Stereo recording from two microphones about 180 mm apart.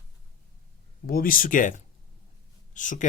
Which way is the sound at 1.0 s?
55° left (ahead or behind).